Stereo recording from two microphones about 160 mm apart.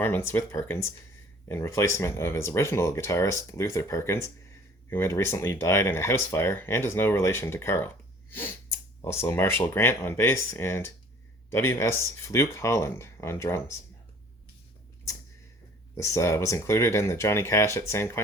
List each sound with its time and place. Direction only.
0.0 s speech: 15° left (ahead or behind)
9.0 s speech: 15° left (ahead or behind)
16.0 s speech: 20° left (ahead or behind)